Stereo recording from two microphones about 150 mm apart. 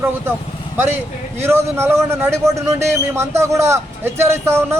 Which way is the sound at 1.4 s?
15° right (ahead or behind).